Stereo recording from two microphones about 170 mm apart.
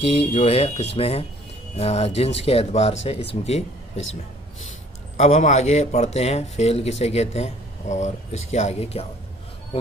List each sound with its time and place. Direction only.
0.3 s speech: 40° left (ahead or behind)
5.1 s speech: 45° left (ahead or behind)